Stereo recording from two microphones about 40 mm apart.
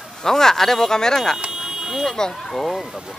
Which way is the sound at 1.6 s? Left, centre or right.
Centre.